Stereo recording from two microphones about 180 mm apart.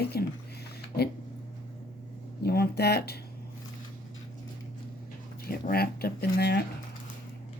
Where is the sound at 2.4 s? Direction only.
65° left (ahead or behind).